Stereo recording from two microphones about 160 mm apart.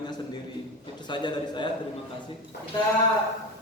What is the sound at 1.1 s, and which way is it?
Speech, 30° left (ahead or behind).